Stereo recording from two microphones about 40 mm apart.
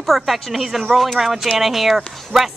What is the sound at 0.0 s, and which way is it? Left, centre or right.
A woman's voice, centre.